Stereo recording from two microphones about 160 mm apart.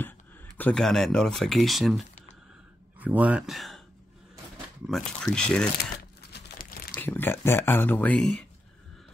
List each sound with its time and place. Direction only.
0.6 s speech: 5° left (ahead or behind)
4.8 s speech: 5° left (ahead or behind)
6.3 s crumpling: 70° left (ahead or behind)
7.0 s speech: 15° left (ahead or behind)